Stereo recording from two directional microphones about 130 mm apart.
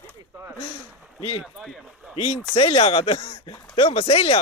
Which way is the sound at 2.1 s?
55° left (ahead or behind).